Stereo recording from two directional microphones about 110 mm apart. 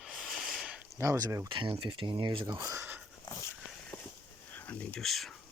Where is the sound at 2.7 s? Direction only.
20° right (ahead or behind).